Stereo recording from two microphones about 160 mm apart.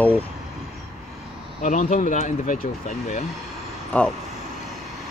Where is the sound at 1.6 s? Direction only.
50° left (ahead or behind).